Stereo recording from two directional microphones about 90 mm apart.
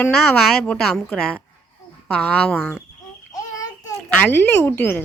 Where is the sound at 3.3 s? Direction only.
45° left (ahead or behind).